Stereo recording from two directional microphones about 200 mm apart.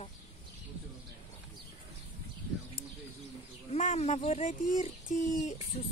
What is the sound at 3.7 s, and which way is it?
Speech, 35° left (ahead or behind).